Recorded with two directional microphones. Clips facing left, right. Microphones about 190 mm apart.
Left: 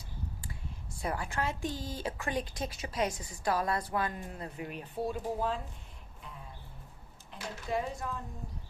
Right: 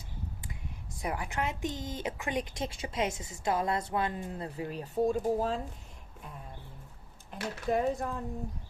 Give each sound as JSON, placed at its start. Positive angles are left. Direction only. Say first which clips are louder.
{"t": 0.9, "sound": "a woman's voice", "louder": "right 1 dB", "side_deg": -15}
{"t": 7.3, "sound": "speech", "louder": "right 5 dB", "side_deg": -50}